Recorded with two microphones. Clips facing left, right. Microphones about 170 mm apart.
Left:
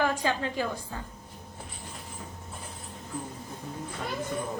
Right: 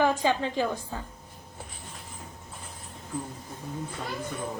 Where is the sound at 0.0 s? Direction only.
20° right (ahead or behind).